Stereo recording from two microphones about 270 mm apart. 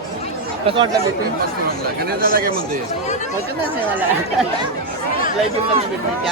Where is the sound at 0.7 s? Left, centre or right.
Right.